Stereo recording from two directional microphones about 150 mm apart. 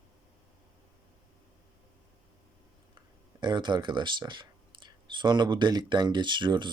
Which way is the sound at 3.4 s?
30° right (ahead or behind).